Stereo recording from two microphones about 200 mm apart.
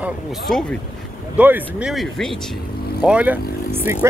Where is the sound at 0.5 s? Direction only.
5° left (ahead or behind).